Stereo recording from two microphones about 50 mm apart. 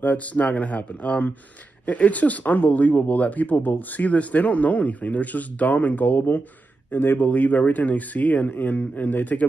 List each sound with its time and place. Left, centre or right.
0.0 s a man's voice: left
7.2 s speech: left